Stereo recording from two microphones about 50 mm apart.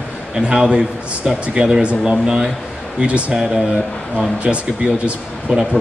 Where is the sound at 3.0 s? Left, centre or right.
Right.